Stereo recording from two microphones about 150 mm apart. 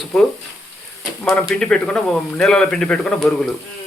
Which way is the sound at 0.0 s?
5° left (ahead or behind).